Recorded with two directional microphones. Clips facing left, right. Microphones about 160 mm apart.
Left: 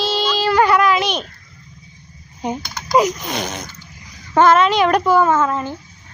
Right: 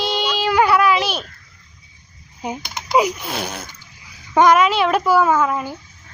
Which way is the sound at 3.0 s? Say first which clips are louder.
Left 2 dB; 10° right (ahead or behind).